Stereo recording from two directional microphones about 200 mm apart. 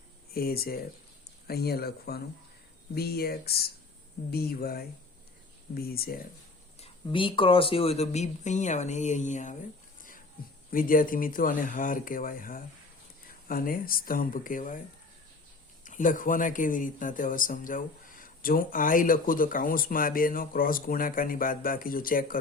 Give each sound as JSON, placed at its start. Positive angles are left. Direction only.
{"t": 0.3, "sound": "speech", "side_deg": 50}
{"t": 6.7, "sound": "speech", "side_deg": 30}
{"t": 10.7, "sound": "speech", "side_deg": 45}
{"t": 15.8, "sound": "speech", "side_deg": 40}